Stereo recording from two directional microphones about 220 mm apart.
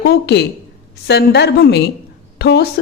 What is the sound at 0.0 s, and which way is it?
A woman's voice, 50° left (ahead or behind).